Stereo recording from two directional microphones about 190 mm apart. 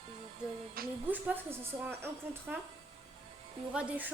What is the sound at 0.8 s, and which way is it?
Speech, 50° right (ahead or behind).